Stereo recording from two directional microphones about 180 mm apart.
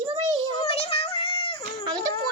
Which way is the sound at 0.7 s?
30° left (ahead or behind).